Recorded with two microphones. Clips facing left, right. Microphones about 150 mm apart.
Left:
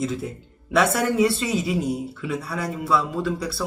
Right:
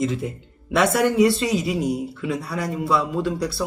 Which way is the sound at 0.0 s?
Centre (ahead or behind).